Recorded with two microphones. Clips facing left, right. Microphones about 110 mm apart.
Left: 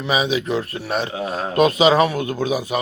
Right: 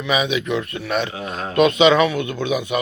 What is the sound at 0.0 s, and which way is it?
A man's voice, 30° left (ahead or behind).